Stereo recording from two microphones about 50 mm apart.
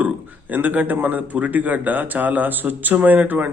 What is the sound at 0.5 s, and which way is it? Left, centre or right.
A man's voice, right.